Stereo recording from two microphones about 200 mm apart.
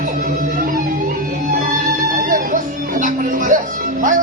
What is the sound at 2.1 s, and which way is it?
Music, 40° right (ahead or behind).